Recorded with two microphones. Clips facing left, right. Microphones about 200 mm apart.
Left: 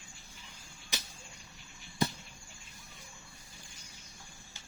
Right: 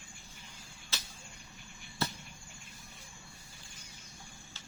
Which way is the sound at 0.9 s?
15° left (ahead or behind).